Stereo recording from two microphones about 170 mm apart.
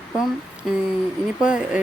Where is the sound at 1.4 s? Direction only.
5° right (ahead or behind).